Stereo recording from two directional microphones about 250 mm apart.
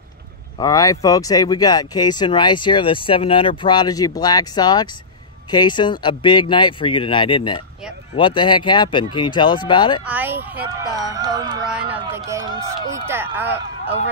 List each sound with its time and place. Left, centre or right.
0.6 s speech: centre
10.0 s speech: centre
11.7 s speech: centre